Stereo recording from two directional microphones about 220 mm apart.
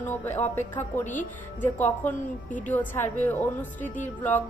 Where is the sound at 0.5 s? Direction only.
10° left (ahead or behind).